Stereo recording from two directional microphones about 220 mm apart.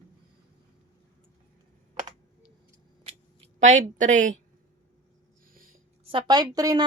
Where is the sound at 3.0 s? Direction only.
30° right (ahead or behind).